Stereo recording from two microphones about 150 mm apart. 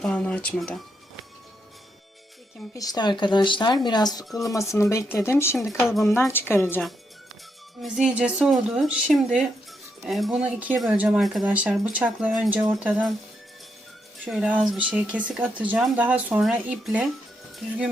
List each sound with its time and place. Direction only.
0.0 s a sound: 10° left (ahead or behind)
2.7 s speech: 25° left (ahead or behind)
5.5 s a woman's voice: centre (ahead or behind)
6.0 s a woman's voice: 20° left (ahead or behind)
7.8 s a woman's voice: 5° right (ahead or behind)
14.3 s speech: 5° right (ahead or behind)